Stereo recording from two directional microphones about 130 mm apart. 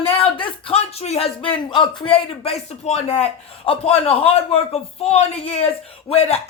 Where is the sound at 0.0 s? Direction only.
40° left (ahead or behind).